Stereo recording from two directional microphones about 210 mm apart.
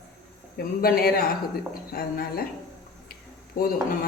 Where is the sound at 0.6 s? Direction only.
45° left (ahead or behind).